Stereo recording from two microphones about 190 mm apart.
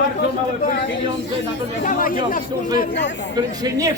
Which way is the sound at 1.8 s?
45° left (ahead or behind).